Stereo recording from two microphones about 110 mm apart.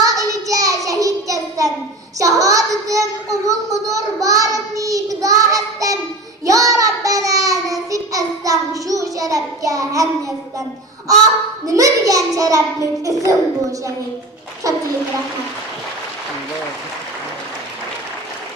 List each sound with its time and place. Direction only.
0.0 s a sound: 30° right (ahead or behind)
2.1 s child singing: 30° right (ahead or behind)
11.6 s a child's voice: 30° right (ahead or behind)